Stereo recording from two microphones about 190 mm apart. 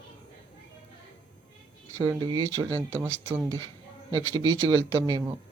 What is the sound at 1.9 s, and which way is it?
Speech, 20° right (ahead or behind).